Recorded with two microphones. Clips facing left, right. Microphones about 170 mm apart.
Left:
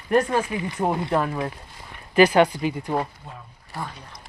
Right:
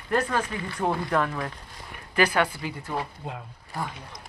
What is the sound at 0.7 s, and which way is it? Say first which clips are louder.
Speech: left 2 dB; 25° left (ahead or behind).